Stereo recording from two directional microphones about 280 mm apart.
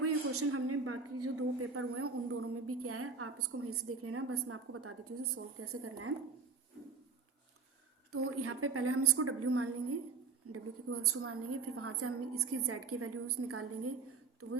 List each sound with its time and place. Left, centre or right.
0.0 s a man's voice: right
8.1 s a woman's voice: right